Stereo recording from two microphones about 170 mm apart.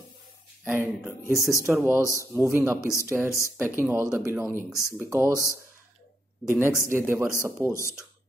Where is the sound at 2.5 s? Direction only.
15° right (ahead or behind).